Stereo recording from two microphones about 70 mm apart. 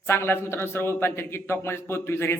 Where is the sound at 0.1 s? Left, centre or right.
Left.